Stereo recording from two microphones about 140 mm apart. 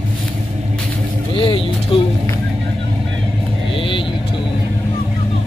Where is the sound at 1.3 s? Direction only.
40° left (ahead or behind).